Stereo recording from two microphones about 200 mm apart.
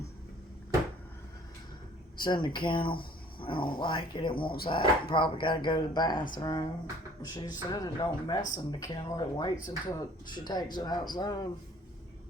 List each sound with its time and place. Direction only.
2.2 s speech: 20° left (ahead or behind)